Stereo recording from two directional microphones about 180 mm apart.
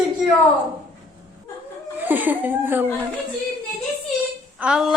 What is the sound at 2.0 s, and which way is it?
Speech, 10° right (ahead or behind).